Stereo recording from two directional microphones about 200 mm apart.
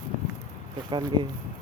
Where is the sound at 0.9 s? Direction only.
20° right (ahead or behind).